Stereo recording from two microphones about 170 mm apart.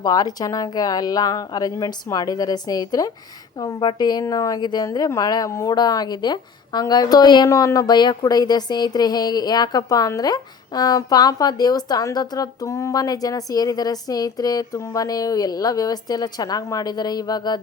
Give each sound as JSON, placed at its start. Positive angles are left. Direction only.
{"t": 0.0, "sound": "a woman's voice", "side_deg": 20}